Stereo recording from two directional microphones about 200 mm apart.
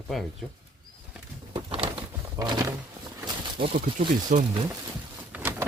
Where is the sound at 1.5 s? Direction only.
25° right (ahead or behind).